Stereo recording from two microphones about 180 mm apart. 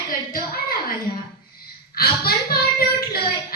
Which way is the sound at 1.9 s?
55° left (ahead or behind).